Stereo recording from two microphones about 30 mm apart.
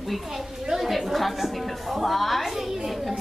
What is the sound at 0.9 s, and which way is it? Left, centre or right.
A woman's voice, centre.